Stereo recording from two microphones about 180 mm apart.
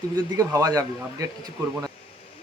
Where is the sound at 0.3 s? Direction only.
20° right (ahead or behind).